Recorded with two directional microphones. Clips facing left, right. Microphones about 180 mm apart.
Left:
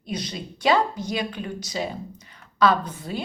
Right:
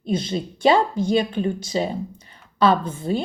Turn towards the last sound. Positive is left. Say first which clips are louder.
# right 5 dB
turn(degrees=-25)  # may be behind; listen again after turning